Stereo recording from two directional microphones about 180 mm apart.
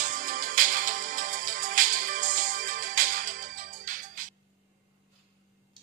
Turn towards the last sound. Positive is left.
turn(degrees=-50)  # may be behind; listen again after turning